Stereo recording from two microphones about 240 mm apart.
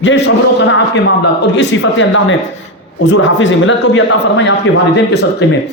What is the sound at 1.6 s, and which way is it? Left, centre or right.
A man's voice, left.